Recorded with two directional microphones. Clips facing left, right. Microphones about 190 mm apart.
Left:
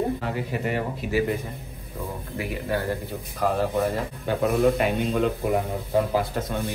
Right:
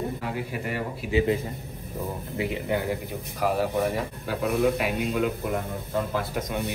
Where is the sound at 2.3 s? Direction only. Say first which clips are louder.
Even; 20° right (ahead or behind).